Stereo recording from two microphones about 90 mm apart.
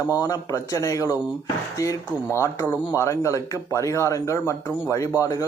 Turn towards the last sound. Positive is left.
turn(degrees=40)  # may be behind; listen again after turning